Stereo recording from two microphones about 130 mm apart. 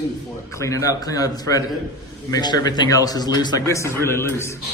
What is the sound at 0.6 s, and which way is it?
A man's voice, 25° left (ahead or behind).